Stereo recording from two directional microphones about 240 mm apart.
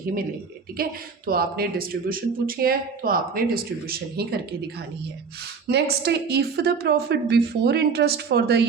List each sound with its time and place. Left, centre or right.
0.8 s speech: right
5.6 s a woman's voice: right